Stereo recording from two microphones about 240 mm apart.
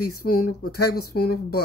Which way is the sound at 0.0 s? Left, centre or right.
Left.